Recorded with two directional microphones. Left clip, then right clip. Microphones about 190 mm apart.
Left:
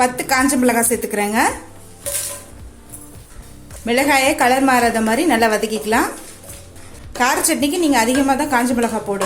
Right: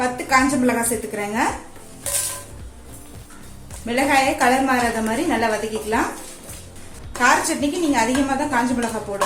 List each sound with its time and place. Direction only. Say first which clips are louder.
0.0 s a woman's voice: left 2 dB; 50° left (ahead or behind)
3.8 s a woman's voice: left 3 dB; 50° left (ahead or behind)
7.2 s a woman's voice: left 1 dB; 50° left (ahead or behind)